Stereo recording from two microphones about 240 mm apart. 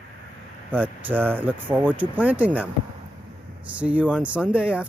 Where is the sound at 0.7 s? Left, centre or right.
Centre.